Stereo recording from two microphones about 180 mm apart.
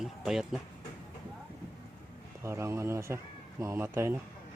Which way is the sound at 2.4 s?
15° right (ahead or behind).